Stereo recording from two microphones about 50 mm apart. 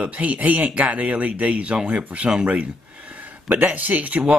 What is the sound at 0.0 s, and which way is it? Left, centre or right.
Speech, right.